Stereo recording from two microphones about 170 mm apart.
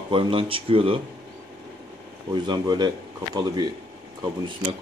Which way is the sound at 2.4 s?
25° right (ahead or behind).